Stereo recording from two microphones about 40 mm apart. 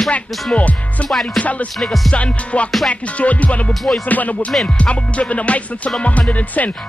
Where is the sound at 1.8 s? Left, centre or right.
Centre.